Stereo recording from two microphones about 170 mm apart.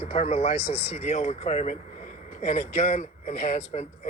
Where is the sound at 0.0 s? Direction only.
40° left (ahead or behind).